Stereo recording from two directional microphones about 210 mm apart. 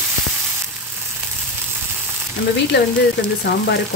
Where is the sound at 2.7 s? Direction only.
55° left (ahead or behind).